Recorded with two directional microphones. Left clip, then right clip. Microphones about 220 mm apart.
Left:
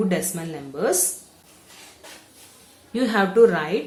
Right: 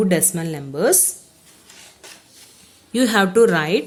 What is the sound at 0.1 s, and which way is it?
Speech, 40° right (ahead or behind).